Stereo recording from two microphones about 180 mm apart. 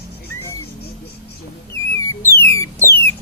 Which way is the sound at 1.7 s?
15° left (ahead or behind).